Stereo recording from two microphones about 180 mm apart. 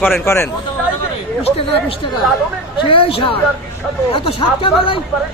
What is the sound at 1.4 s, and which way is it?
Speech, 30° left (ahead or behind).